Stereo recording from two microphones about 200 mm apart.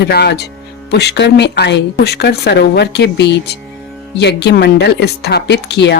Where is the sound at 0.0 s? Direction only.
55° left (ahead or behind).